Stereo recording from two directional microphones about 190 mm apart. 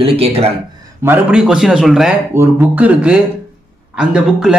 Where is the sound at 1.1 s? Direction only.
5° right (ahead or behind).